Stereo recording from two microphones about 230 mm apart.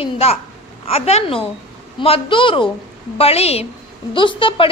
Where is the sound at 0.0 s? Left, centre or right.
Left.